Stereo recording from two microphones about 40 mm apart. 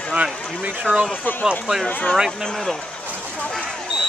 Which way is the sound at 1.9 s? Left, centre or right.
Left.